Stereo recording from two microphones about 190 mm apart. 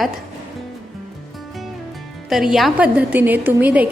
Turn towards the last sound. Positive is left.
turn(degrees=-10)  # may be behind; listen again after turning